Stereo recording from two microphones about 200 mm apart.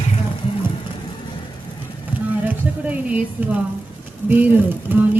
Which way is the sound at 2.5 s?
5° right (ahead or behind).